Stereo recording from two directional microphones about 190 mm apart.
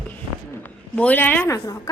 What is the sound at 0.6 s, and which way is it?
A woman's voice, 10° left (ahead or behind).